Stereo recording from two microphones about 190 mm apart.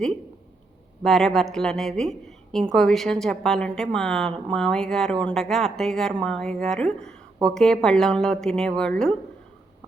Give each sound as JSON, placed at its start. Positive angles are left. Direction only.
{"t": 1.0, "sound": "a woman's voice", "side_deg": 0}